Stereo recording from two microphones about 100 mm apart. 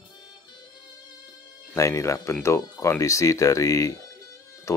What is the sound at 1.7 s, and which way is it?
Speech, 30° left (ahead or behind).